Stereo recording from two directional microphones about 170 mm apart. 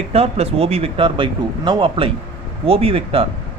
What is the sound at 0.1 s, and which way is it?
Speech, 35° right (ahead or behind).